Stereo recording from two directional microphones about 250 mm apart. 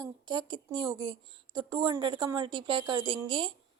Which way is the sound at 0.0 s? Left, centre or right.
Centre.